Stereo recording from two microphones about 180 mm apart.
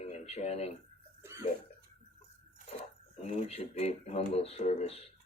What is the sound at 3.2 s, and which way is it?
Speech, 35° left (ahead or behind).